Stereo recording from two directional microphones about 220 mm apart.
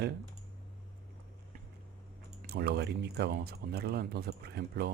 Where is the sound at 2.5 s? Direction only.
45° right (ahead or behind).